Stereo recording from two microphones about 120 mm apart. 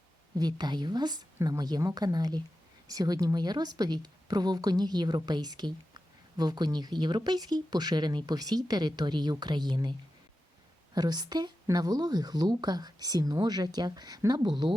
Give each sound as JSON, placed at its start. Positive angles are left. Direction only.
{"t": 0.3, "sound": "a woman's voice", "side_deg": -35}
{"t": 10.9, "sound": "a woman's voice", "side_deg": -35}